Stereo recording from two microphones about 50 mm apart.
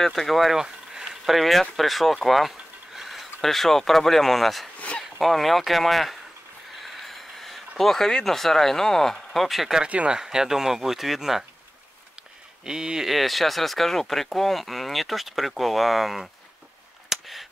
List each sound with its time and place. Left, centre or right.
0.0 s speech: centre
9.8 s speech: right
10.1 s speech: centre
12.6 s speech: centre
13.1 s speech: centre
17.1 s a sound: centre